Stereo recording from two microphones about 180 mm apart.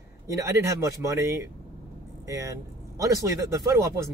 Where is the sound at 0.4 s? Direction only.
15° right (ahead or behind).